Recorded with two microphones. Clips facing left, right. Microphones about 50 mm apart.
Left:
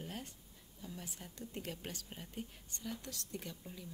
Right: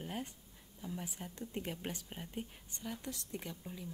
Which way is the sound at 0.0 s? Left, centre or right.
Centre.